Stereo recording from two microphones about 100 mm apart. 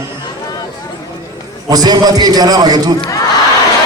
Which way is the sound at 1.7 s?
40° right (ahead or behind).